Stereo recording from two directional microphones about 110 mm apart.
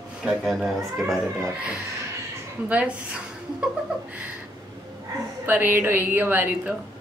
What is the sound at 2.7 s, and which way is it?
Speech, 10° right (ahead or behind).